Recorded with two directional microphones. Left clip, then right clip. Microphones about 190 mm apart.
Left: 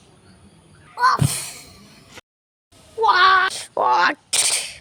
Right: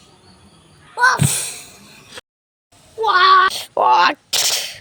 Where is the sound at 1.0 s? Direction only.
65° left (ahead or behind).